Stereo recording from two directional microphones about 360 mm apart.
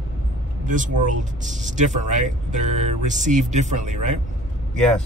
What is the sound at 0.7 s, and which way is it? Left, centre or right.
Speech, right.